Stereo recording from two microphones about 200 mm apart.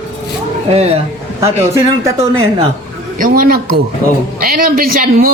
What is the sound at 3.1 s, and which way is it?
A man's voice, 45° right (ahead or behind).